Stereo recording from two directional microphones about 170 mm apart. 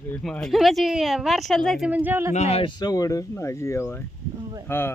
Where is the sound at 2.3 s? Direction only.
40° left (ahead or behind).